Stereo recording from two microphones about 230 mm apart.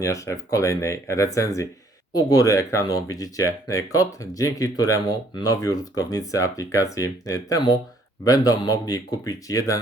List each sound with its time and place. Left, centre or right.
0.0 s speech: centre